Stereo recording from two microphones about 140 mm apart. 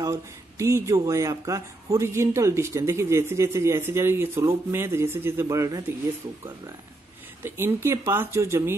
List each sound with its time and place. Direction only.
0.0 s speech: 20° right (ahead or behind)
7.4 s speech: 20° right (ahead or behind)